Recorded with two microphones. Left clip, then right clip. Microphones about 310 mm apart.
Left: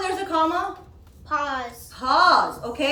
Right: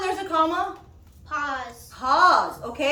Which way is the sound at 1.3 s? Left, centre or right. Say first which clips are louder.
Left 3 dB; left.